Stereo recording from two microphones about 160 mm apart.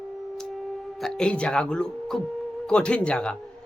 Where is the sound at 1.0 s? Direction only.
5° left (ahead or behind).